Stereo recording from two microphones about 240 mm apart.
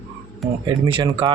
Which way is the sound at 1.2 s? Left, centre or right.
Centre.